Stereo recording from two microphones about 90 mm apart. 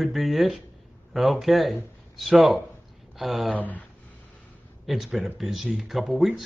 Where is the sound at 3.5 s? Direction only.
20° left (ahead or behind).